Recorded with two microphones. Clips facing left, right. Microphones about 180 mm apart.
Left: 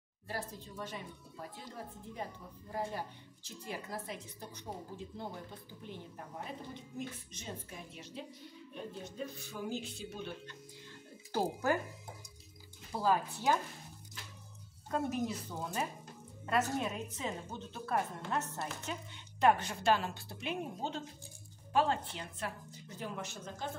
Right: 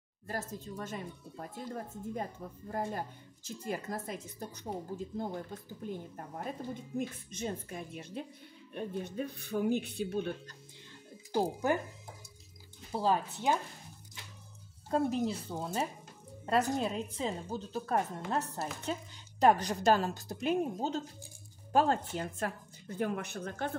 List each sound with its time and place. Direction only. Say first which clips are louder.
0.3 s a woman's voice: right 3 dB; 45° right (ahead or behind)
11.3 s a woman's voice: right 2 dB; 20° right (ahead or behind)
12.9 s a woman's voice: right 1 dB; 25° right (ahead or behind)
14.9 s a woman's voice: right 4 dB; 30° right (ahead or behind); by 23.7 s 65° right (ahead or behind)